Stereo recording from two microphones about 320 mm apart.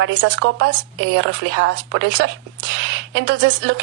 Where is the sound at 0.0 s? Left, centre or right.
Right.